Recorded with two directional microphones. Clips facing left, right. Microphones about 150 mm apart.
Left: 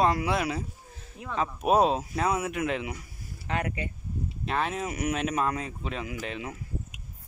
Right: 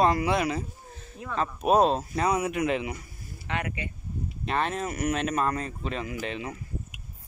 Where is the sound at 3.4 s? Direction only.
40° left (ahead or behind).